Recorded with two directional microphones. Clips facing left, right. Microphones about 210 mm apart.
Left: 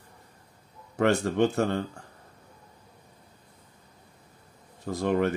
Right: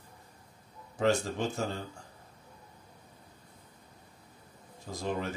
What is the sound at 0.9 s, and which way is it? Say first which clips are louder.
Speech: left 5 dB; 65° left (ahead or behind).